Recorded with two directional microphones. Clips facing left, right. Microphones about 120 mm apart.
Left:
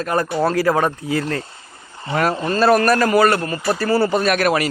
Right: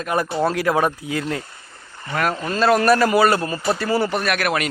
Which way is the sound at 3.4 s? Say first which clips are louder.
Left 1 dB; 20° right (ahead or behind).